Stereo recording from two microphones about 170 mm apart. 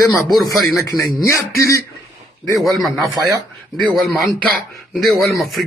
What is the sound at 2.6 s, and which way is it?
Speech, centre (ahead or behind).